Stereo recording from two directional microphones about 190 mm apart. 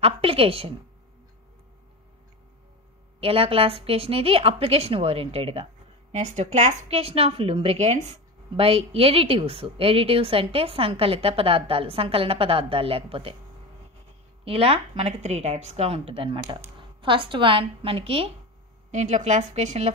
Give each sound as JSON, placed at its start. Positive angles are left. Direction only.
{"t": 0.0, "sound": "a woman's voice", "side_deg": -30}
{"t": 3.2, "sound": "a woman's voice", "side_deg": -30}
{"t": 14.4, "sound": "a woman's voice", "side_deg": -30}